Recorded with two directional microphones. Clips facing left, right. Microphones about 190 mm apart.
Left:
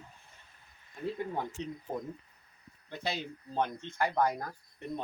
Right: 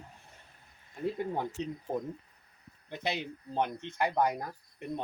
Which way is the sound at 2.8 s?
20° right (ahead or behind).